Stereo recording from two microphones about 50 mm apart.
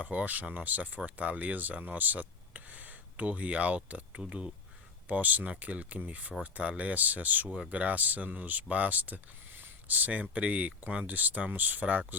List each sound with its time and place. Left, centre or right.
0.0 s speech: right
5.0 s speech: right